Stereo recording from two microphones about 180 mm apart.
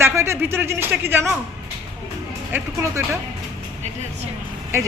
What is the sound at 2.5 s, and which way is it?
Speech, 15° right (ahead or behind).